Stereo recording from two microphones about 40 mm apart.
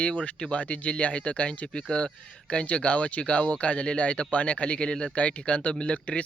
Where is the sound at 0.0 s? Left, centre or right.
Left.